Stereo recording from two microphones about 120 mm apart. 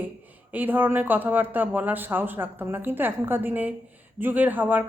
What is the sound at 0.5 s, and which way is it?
A woman's voice, 15° right (ahead or behind).